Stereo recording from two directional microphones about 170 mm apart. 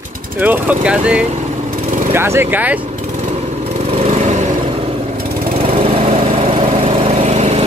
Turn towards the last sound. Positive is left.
turn(degrees=-40)  # may be behind; listen again after turning